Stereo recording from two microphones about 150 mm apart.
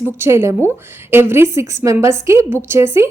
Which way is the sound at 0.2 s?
20° right (ahead or behind).